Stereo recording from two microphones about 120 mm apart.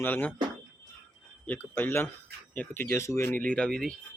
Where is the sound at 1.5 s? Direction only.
15° left (ahead or behind).